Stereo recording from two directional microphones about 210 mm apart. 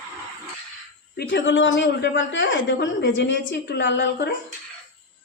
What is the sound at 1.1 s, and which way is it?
A woman's voice, 55° left (ahead or behind).